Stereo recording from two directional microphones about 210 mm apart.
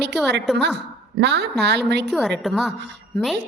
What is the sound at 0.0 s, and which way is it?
A woman's voice, 55° right (ahead or behind).